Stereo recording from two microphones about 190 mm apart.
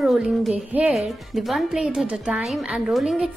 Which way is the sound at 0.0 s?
Centre (ahead or behind).